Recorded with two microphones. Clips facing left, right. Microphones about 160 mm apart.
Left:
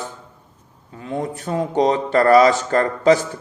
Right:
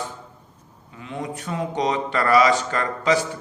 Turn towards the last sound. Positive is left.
turn(degrees=40)  # may be behind; listen again after turning